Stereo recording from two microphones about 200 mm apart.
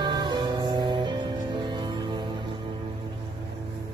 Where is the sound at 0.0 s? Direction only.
20° right (ahead or behind).